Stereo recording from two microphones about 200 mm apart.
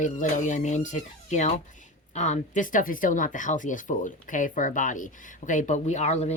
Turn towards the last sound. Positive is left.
turn(degrees=35)  # may be behind; listen again after turning